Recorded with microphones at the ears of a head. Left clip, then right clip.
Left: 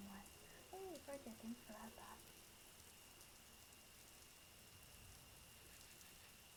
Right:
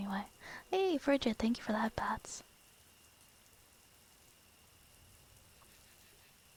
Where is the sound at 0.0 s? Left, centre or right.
Right.